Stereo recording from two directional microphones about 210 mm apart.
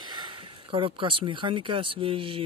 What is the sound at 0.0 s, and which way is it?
Speech, 20° right (ahead or behind).